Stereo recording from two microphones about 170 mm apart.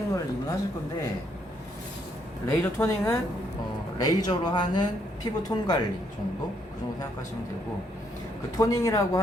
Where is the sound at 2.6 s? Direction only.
15° left (ahead or behind).